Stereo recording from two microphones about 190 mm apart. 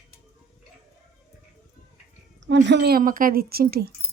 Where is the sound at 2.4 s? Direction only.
70° right (ahead or behind).